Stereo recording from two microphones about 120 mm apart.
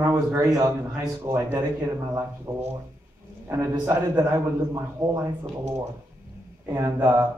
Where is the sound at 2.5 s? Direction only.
20° right (ahead or behind).